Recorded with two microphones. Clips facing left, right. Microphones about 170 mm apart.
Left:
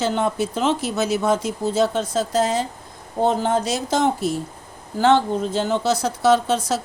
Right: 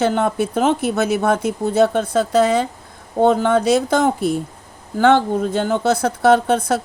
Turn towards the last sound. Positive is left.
turn(degrees=-55)  # may be behind; listen again after turning